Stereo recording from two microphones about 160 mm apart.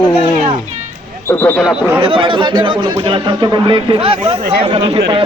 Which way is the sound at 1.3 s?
15° left (ahead or behind).